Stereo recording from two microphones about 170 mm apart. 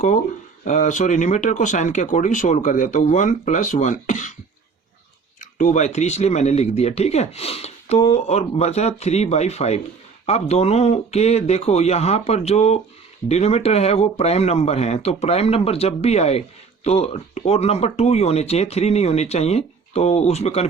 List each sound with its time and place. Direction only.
0.6 s speech: 45° left (ahead or behind)
5.4 s speech: 50° left (ahead or behind)